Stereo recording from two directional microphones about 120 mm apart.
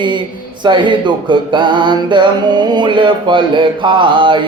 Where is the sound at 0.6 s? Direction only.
40° right (ahead or behind).